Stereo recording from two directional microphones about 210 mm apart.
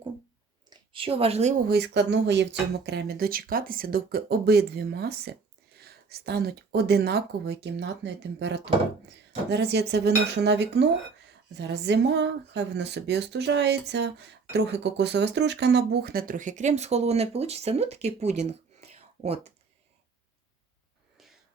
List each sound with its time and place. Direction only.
0.7 s speech: 25° right (ahead or behind)
1.6 s speech: 50° right (ahead or behind); by 19.5 s 30° right (ahead or behind)